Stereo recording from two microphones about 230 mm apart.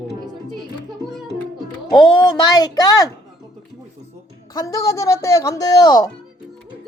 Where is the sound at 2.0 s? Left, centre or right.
Centre.